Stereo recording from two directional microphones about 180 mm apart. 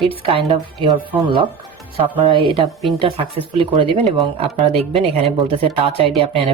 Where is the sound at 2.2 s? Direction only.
30° right (ahead or behind).